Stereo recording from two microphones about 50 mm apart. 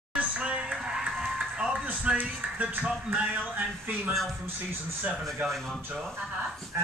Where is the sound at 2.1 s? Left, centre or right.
Right.